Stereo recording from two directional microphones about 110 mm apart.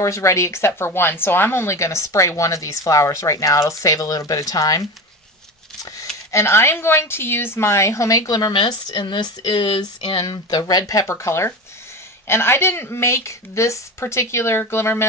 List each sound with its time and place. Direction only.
0.0 s speech: 30° left (ahead or behind)
8.5 s speech: 50° left (ahead or behind); by 15.0 s 25° left (ahead or behind)